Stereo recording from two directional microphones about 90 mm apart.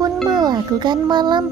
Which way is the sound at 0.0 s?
50° right (ahead or behind).